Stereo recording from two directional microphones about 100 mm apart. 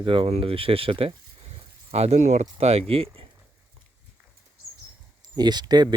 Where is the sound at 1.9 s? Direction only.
90° right; by 3.2 s 75° right (ahead or behind).